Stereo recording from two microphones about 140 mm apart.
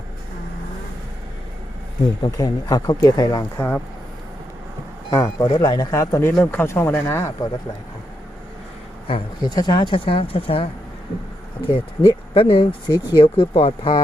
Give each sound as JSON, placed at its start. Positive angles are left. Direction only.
{"t": 2.2, "sound": "speech", "side_deg": 30}
{"t": 5.1, "sound": "speech", "side_deg": 25}
{"t": 9.0, "sound": "speech", "side_deg": 35}
{"t": 12.3, "sound": "speech", "side_deg": 40}